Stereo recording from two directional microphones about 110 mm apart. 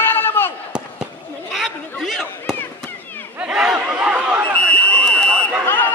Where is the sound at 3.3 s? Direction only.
10° right (ahead or behind).